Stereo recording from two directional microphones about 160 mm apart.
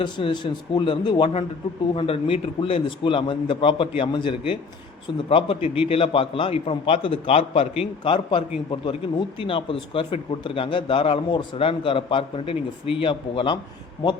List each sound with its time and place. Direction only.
0.0 s a man's voice: 30° left (ahead or behind)